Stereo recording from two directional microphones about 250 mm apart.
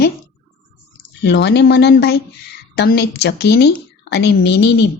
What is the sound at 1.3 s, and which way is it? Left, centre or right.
A woman's voice, left.